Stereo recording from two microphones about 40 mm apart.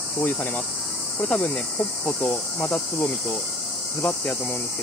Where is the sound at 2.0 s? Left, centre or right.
Left.